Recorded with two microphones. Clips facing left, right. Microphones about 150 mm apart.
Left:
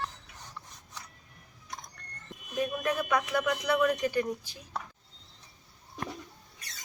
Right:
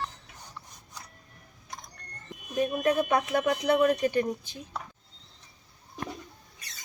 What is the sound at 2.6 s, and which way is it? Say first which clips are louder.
Speech: right 5 dB; 30° right (ahead or behind).